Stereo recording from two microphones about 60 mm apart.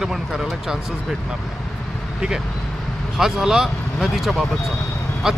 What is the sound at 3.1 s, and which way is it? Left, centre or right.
Speech, centre.